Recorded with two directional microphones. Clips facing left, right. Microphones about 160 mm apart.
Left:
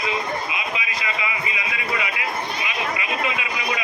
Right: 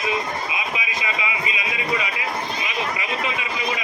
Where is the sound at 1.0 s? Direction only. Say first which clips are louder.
Right 1 dB; 20° right (ahead or behind).